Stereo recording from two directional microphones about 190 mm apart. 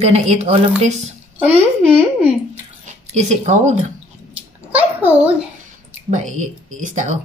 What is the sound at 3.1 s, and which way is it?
Speech, 40° right (ahead or behind).